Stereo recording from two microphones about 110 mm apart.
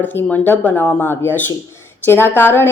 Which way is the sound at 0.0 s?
15° left (ahead or behind).